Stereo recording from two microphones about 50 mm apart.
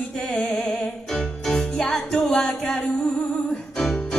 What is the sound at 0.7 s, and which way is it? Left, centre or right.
Music, centre.